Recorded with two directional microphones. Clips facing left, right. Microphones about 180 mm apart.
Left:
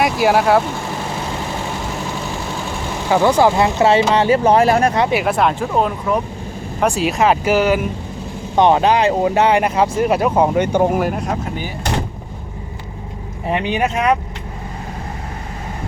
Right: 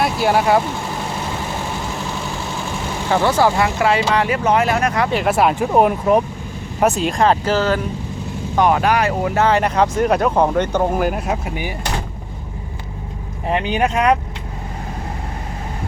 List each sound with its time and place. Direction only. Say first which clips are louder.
0.0 s speech: left 2 dB; 5° left (ahead or behind)
3.1 s speech: left 3 dB; 15° left (ahead or behind); by 5.0 s 30° left (ahead or behind)
5.2 s speech: right 1 dB; 5° right (ahead or behind)
6.7 s speech: even; centre (ahead or behind)
8.5 s speech: left 3 dB; 25° left (ahead or behind)
11.0 s speech: even; 5° right (ahead or behind)
13.5 s speech: even; 5° left (ahead or behind)